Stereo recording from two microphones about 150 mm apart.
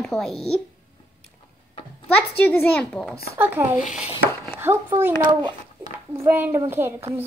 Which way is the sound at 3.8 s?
55° left (ahead or behind).